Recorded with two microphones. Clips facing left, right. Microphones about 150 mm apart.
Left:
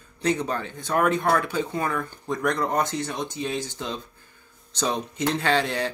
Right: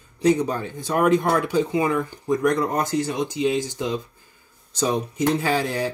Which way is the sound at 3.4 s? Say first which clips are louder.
Right 7 dB; 15° right (ahead or behind).